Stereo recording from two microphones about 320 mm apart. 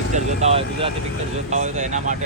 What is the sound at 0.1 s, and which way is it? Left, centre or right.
Speech, centre.